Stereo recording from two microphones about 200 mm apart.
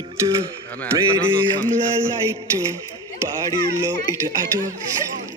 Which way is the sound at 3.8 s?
15° right (ahead or behind).